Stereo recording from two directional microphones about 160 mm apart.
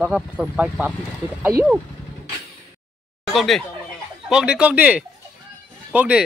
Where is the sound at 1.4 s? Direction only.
15° right (ahead or behind).